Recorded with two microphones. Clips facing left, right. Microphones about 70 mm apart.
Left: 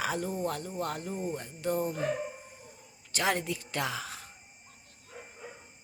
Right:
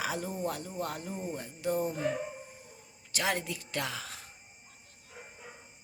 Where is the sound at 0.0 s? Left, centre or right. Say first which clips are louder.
Left 2 dB; centre.